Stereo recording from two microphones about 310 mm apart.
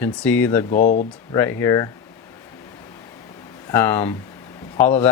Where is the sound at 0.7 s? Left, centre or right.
Left.